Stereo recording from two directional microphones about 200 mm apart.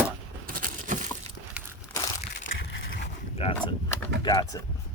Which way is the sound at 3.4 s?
30° left (ahead or behind).